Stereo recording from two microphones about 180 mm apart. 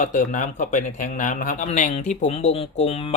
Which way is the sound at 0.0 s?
45° left (ahead or behind).